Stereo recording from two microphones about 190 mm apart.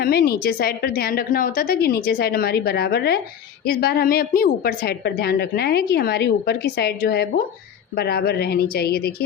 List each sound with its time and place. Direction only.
0.0 s a woman's voice: 55° left (ahead or behind)